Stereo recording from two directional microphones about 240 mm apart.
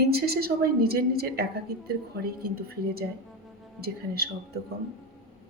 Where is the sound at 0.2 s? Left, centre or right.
Right.